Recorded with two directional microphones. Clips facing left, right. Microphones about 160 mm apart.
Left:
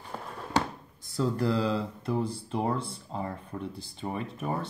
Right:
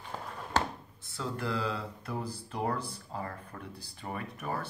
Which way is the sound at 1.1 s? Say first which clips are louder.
Left 7 dB; 35° left (ahead or behind).